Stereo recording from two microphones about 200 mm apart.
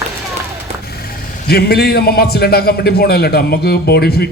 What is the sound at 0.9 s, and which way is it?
A man's voice, 50° left (ahead or behind).